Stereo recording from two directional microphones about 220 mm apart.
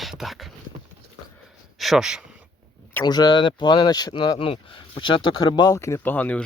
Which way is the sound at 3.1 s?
20° left (ahead or behind).